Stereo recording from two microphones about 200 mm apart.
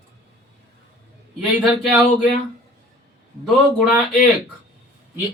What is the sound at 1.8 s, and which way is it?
Speech, 5° right (ahead or behind).